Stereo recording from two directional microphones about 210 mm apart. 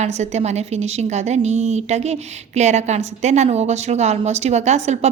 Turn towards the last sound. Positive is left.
turn(degrees=-30)  # may be behind; listen again after turning